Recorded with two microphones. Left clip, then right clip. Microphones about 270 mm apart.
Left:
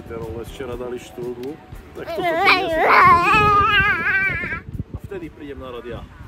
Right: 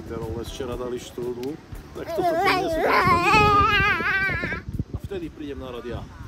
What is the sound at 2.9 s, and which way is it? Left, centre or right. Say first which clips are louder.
Baby cry: left 7 dB; centre.